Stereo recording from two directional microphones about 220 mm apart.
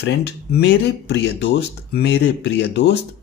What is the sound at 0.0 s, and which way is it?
Speech, 50° left (ahead or behind).